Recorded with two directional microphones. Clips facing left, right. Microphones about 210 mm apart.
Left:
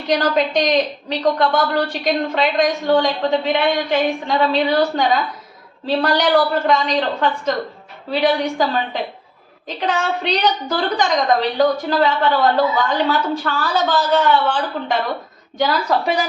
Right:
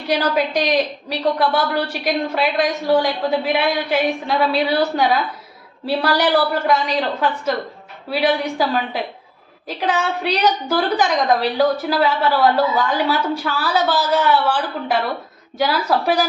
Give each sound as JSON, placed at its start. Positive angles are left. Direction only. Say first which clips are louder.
{"t": 0.1, "sound": "a woman's voice", "louder": "left 2 dB", "side_deg": -5}